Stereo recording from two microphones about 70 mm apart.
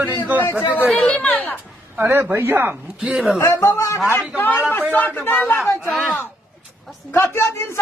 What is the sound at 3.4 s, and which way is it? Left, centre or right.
Speech, left.